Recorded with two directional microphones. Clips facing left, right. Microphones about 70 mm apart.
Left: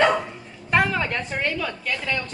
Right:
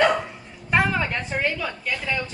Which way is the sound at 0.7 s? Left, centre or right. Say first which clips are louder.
Even; centre.